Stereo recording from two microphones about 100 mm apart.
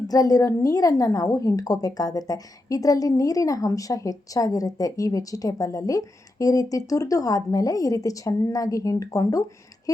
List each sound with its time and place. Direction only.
0.1 s a woman's voice: 40° left (ahead or behind)